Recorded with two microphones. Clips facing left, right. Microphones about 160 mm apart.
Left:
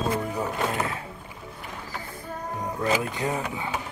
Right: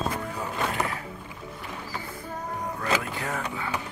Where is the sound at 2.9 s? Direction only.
15° left (ahead or behind).